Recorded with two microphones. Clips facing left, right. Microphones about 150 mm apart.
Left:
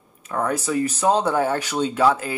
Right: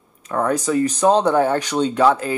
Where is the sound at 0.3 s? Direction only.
35° right (ahead or behind).